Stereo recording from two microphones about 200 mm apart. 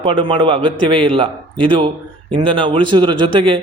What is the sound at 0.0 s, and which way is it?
A man's voice, 25° right (ahead or behind).